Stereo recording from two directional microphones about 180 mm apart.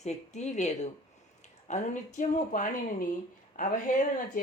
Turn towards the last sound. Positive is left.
turn(degrees=45)  # may be behind; listen again after turning